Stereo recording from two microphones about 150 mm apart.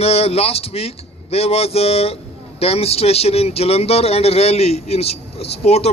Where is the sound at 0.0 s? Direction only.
40° left (ahead or behind).